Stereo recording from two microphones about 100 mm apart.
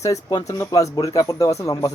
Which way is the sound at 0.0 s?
40° left (ahead or behind).